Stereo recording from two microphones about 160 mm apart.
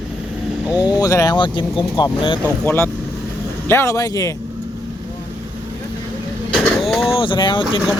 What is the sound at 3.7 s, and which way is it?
Speech, 15° left (ahead or behind).